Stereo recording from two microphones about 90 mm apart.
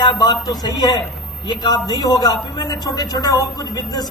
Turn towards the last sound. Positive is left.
turn(degrees=45)  # may be behind; listen again after turning